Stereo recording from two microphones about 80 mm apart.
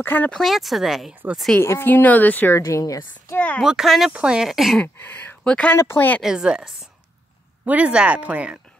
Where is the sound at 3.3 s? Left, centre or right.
Left.